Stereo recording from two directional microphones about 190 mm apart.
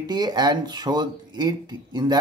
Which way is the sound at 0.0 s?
20° right (ahead or behind).